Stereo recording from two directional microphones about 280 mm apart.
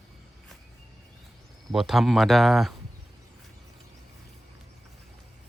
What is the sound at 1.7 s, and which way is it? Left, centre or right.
Speech, centre.